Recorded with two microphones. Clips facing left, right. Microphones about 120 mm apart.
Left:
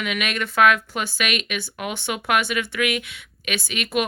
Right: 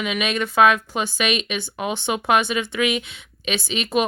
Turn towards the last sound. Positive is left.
turn(degrees=-25)  # may be behind; listen again after turning